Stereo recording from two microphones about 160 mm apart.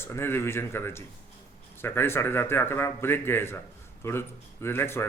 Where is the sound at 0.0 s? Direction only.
15° left (ahead or behind).